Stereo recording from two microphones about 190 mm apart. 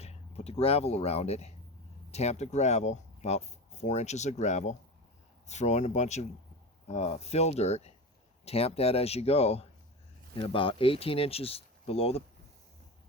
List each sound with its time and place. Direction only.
0.0 s speech: 35° left (ahead or behind)